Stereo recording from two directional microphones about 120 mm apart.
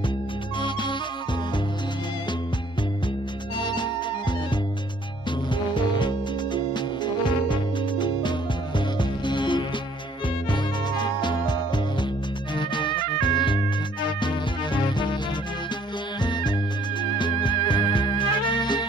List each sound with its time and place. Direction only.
3.5 s music: 40° left (ahead or behind)
5.5 s music: 40° left (ahead or behind)
16.2 s music: 40° left (ahead or behind)